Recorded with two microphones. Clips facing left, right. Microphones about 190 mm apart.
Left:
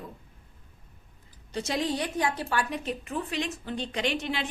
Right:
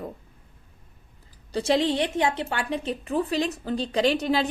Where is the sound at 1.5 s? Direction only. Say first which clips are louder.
Right 7 dB; 30° right (ahead or behind).